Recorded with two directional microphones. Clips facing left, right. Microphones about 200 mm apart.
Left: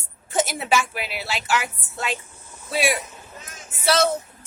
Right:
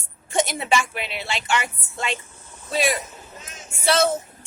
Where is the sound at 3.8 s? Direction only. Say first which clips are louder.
Even; centre (ahead or behind).